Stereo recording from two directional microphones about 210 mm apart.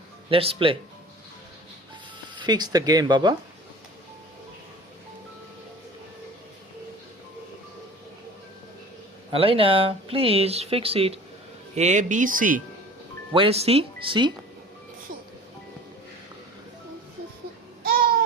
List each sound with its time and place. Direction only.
0.3 s speech: 25° right (ahead or behind)
2.3 s speech: 20° right (ahead or behind)
9.3 s speech: 25° right (ahead or behind)
13.3 s speech: 25° right (ahead or behind)